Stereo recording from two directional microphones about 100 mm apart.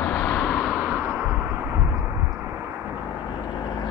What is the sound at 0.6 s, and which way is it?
Vehicle, 15° right (ahead or behind).